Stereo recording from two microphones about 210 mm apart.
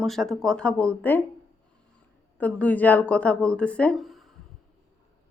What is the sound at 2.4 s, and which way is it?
Speech, 5° left (ahead or behind).